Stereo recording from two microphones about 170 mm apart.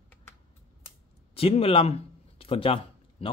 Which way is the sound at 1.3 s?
35° left (ahead or behind).